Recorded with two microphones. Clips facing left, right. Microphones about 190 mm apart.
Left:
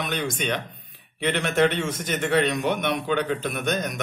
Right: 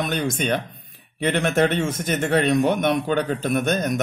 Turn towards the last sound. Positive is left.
turn(degrees=-45)  # may be behind; listen again after turning